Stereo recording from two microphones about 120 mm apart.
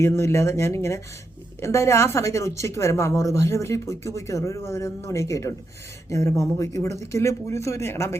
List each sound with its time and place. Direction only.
0.0 s speech: 20° left (ahead or behind)